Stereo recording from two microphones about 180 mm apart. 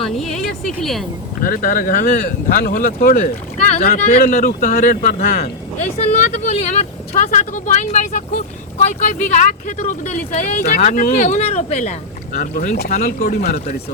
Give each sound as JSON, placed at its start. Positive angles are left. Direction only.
{"t": 0.0, "sound": "a woman's voice", "side_deg": 0}
{"t": 1.5, "sound": "speech", "side_deg": 50}
{"t": 3.8, "sound": "speech", "side_deg": 40}